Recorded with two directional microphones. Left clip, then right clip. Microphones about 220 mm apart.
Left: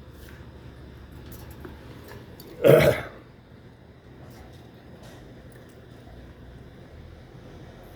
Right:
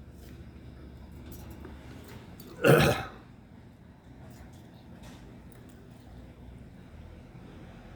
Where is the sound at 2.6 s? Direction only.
20° right (ahead or behind).